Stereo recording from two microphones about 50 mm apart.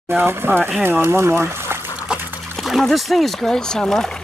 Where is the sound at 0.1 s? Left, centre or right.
Right.